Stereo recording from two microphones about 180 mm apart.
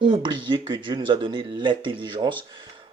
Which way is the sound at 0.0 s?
25° right (ahead or behind).